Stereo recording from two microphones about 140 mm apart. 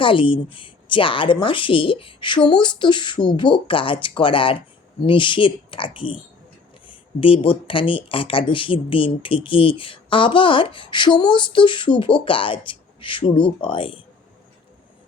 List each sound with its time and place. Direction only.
0.0 s speech: 35° left (ahead or behind)
6.8 s a sound: 40° left (ahead or behind)
7.7 s speech: 40° left (ahead or behind)